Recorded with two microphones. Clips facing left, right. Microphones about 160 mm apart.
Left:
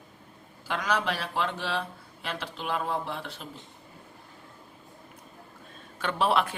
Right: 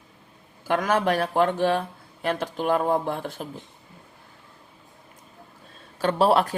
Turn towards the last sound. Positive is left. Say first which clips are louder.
# right 6 dB
turn(degrees=-40)  # may be behind; listen again after turning